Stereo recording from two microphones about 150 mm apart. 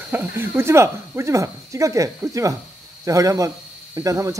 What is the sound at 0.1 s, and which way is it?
Speech, 10° right (ahead or behind).